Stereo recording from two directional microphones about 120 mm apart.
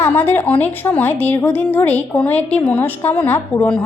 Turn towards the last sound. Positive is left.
turn(degrees=10)  # may be behind; listen again after turning